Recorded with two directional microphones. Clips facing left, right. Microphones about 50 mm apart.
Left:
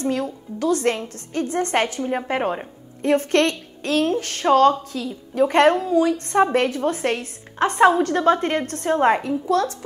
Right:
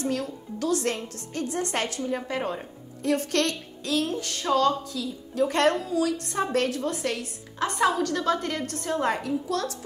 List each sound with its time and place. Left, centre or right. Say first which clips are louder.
0.0 s a woman's voice: left 5 dB; left
5.4 s a woman's voice: left 7 dB; left